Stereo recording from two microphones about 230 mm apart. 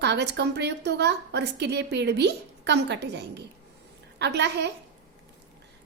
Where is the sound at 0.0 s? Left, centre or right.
Right.